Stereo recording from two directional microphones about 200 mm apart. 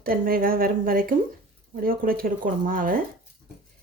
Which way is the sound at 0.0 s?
45° right (ahead or behind).